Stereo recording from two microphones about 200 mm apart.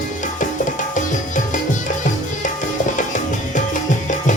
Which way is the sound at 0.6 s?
40° left (ahead or behind).